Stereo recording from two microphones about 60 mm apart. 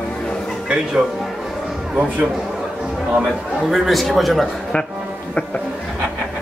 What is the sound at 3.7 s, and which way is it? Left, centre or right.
Speech, centre.